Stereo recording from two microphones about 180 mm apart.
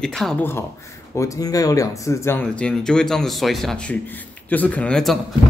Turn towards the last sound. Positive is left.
turn(degrees=5)  # may be behind; listen again after turning